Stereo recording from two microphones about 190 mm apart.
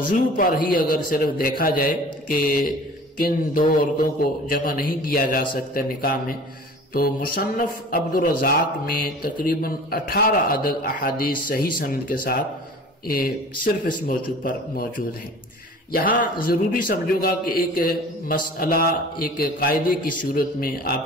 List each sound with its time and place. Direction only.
0.0 s a man's voice: 45° left (ahead or behind)
14.0 s a man's voice: 45° left (ahead or behind)